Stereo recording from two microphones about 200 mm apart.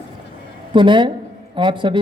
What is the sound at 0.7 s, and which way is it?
Speech, 25° right (ahead or behind).